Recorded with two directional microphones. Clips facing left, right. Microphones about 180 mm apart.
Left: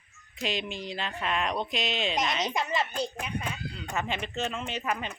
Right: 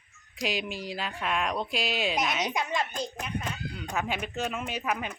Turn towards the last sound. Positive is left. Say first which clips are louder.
# right 1 dB
turn(degrees=-5)  # may be behind; listen again after turning